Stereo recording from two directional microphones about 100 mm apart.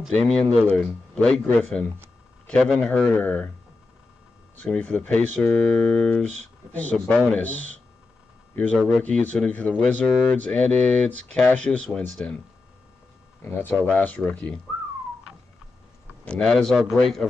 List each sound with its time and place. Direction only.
0.3 s a man's voice: 5° left (ahead or behind)
4.6 s speech: 10° left (ahead or behind)
8.7 s speech: 5° left (ahead or behind)
9.0 s speech: 15° left (ahead or behind)
13.4 s speech: 20° left (ahead or behind)
16.3 s speech: 5° left (ahead or behind)